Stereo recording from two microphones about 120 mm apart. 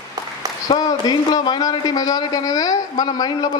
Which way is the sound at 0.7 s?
35° left (ahead or behind).